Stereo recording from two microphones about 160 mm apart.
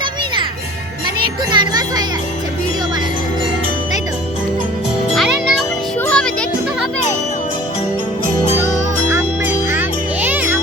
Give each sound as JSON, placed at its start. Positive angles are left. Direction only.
{"t": 1.5, "sound": "a child's voice", "side_deg": -25}
{"t": 5.1, "sound": "music", "side_deg": 0}
{"t": 9.1, "sound": "music", "side_deg": -10}